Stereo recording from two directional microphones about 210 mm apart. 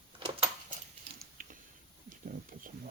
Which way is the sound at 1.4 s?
40° right (ahead or behind).